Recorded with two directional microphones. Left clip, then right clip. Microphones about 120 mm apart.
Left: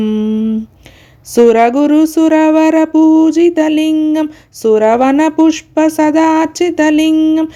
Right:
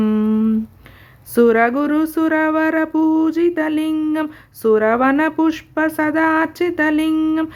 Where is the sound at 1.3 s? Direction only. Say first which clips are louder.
Left 6 dB; 30° left (ahead or behind).